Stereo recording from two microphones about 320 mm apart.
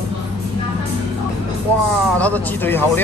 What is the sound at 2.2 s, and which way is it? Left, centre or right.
Speech, centre.